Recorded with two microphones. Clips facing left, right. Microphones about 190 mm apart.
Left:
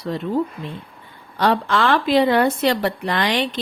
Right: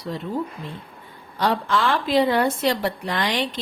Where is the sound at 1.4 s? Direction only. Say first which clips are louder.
Left 3 dB; 70° left (ahead or behind).